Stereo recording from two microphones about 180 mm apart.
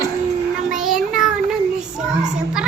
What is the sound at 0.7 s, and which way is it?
Child singing, centre (ahead or behind).